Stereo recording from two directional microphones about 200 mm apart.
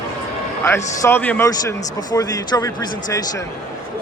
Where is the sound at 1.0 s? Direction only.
10° left (ahead or behind).